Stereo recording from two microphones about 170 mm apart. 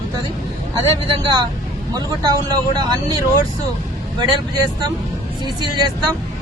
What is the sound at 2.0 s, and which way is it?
Speech, 25° right (ahead or behind).